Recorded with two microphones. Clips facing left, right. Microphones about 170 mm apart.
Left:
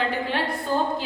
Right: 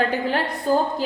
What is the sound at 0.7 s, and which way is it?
Speech, 40° right (ahead or behind).